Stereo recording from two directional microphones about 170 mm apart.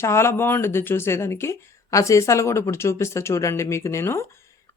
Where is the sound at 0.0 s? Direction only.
15° left (ahead or behind).